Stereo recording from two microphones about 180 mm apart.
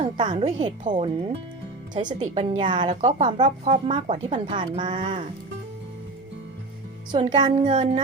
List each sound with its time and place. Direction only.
0.0 s a woman's voice: 30° right (ahead or behind)
3.2 s a woman's voice: 25° right (ahead or behind)
7.1 s a woman's voice: 25° right (ahead or behind)
7.6 s speech: 40° right (ahead or behind)